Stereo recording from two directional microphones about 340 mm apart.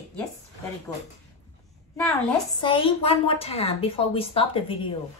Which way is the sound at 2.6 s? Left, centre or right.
Centre.